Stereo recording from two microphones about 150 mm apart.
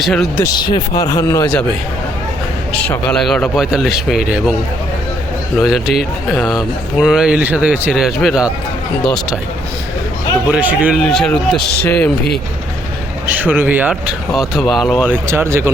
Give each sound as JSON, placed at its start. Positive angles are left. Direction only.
{"t": 0.0, "sound": "speech", "side_deg": 5}
{"t": 0.4, "sound": "a man's voice", "side_deg": 30}
{"t": 2.8, "sound": "speech", "side_deg": 5}
{"t": 5.5, "sound": "speech", "side_deg": 0}
{"t": 10.5, "sound": "speech", "side_deg": -10}
{"t": 11.0, "sound": "speech", "side_deg": 5}
{"t": 13.2, "sound": "speech", "side_deg": -10}
{"t": 14.3, "sound": "speech", "side_deg": 0}
{"t": 15.3, "sound": "speech", "side_deg": -15}